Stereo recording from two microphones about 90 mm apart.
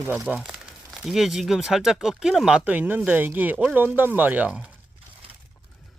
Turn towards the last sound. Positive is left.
turn(degrees=-15)  # may be behind; listen again after turning